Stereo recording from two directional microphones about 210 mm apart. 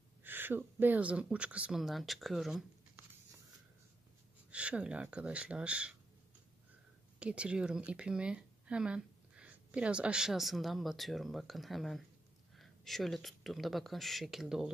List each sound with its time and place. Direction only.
0.2 s speech: 10° right (ahead or behind)
4.5 s speech: 5° right (ahead or behind)
7.2 s speech: 5° right (ahead or behind)